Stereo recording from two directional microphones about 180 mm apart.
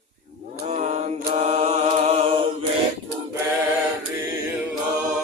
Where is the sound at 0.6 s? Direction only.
40° right (ahead or behind).